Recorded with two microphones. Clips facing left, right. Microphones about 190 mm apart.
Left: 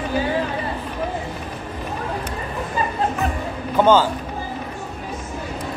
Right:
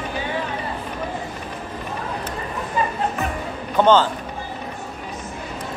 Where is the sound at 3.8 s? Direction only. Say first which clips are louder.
Even; 10° left (ahead or behind).